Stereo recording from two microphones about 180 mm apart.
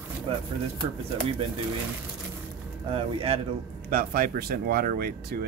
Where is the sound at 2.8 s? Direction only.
30° right (ahead or behind).